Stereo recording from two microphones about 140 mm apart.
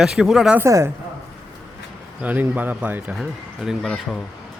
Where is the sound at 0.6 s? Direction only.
20° right (ahead or behind).